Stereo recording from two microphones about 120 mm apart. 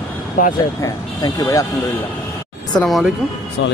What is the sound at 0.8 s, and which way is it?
Speech, 30° left (ahead or behind).